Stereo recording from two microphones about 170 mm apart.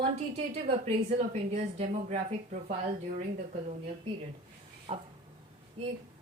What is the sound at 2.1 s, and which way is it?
Speech, 60° right (ahead or behind).